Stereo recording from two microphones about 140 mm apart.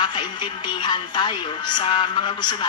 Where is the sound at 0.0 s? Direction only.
30° left (ahead or behind).